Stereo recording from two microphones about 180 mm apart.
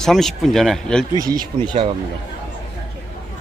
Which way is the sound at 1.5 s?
25° right (ahead or behind).